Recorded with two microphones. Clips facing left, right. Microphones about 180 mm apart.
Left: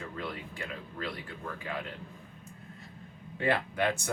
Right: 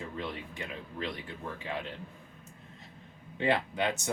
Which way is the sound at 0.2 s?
20° right (ahead or behind).